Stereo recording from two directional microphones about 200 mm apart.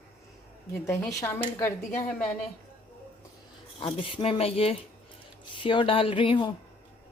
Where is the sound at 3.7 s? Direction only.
25° left (ahead or behind).